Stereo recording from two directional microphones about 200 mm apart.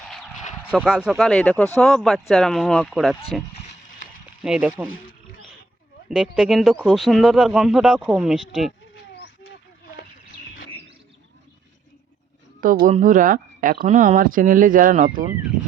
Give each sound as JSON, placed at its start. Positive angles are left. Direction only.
{"t": 0.7, "sound": "speech", "side_deg": -5}
{"t": 4.4, "sound": "speech", "side_deg": -5}
{"t": 6.1, "sound": "speech", "side_deg": -5}
{"t": 12.8, "sound": "speech", "side_deg": -40}